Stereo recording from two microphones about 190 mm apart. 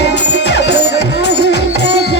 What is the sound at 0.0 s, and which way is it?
Music, 60° left (ahead or behind).